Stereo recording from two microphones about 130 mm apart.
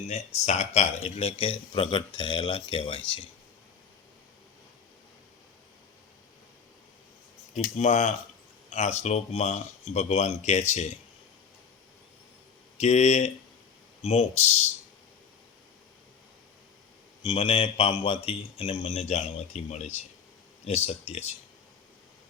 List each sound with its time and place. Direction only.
0.1 s speech: 55° left (ahead or behind)
7.5 s speech: 65° left (ahead or behind)
12.7 s speech: 60° left (ahead or behind)
17.2 s speech: 45° left (ahead or behind)